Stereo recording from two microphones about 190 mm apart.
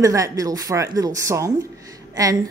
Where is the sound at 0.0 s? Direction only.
15° right (ahead or behind).